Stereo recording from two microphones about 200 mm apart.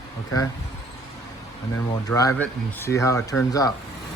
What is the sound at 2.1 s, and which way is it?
Speech, 15° left (ahead or behind).